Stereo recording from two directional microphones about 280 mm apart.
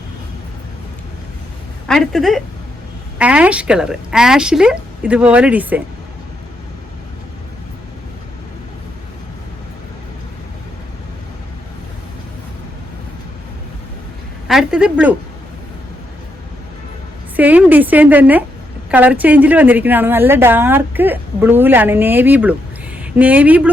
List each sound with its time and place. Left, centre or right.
1.9 s speech: centre
14.4 s speech: centre
17.3 s a woman's voice: centre